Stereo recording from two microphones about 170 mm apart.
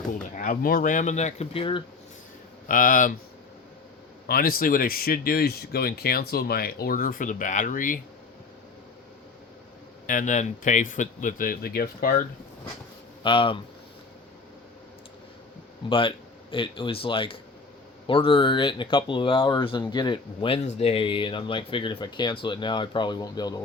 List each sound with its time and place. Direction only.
0.1 s speech: 50° left (ahead or behind); by 1.8 s 30° left (ahead or behind)
2.6 s speech: 55° left (ahead or behind)
4.3 s speech: 60° left (ahead or behind)
10.1 s speech: 45° left (ahead or behind)
13.2 s speech: 30° left (ahead or behind)
15.9 s speech: 30° left (ahead or behind)